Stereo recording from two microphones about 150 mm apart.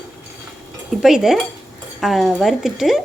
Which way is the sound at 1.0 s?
5° right (ahead or behind).